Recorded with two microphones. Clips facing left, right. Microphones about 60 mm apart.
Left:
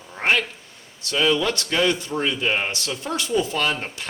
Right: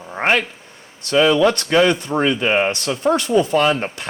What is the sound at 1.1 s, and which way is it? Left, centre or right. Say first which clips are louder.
Speech: right 7 dB; right.